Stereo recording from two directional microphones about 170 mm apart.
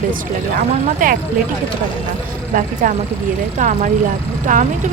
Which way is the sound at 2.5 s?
50° right (ahead or behind).